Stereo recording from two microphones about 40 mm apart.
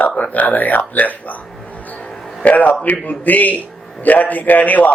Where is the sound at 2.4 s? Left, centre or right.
Left.